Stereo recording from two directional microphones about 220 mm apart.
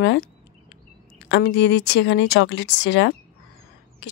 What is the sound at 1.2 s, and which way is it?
A woman's voice, 55° left (ahead or behind).